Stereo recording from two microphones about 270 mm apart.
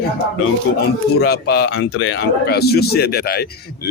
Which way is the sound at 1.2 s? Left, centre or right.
Left.